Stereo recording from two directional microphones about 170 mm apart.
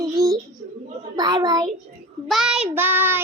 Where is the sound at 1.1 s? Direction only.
25° right (ahead or behind).